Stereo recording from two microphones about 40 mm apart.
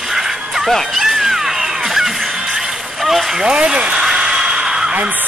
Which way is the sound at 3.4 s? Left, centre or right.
Right.